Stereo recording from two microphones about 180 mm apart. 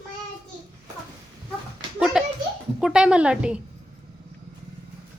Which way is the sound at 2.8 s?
5° right (ahead or behind).